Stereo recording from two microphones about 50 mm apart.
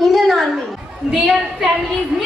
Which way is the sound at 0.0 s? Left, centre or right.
Centre.